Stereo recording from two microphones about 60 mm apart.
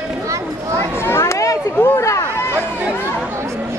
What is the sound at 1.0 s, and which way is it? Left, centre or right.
Chatter, left.